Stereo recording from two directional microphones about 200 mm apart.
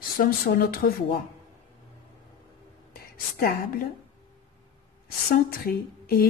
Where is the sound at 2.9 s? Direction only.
50° left (ahead or behind).